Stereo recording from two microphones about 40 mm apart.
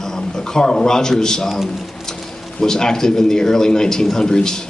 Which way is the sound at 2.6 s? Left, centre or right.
Centre.